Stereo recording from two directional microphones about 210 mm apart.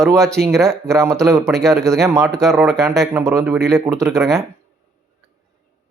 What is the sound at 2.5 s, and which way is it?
Speech, centre (ahead or behind).